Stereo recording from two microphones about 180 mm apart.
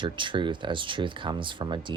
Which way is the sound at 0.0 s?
25° right (ahead or behind).